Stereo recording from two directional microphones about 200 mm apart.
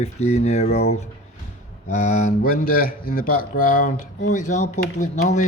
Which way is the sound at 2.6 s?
45° left (ahead or behind).